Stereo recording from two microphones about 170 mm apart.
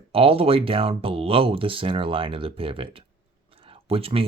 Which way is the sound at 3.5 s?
35° right (ahead or behind).